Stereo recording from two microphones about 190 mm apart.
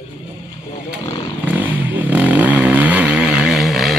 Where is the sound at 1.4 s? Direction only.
10° right (ahead or behind).